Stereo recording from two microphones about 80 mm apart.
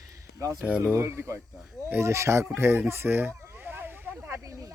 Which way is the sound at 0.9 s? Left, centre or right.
Right.